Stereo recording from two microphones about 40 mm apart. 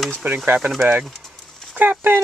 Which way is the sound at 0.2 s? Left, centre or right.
Right.